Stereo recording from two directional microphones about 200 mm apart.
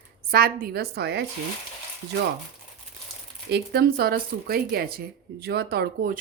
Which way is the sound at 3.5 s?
55° right (ahead or behind).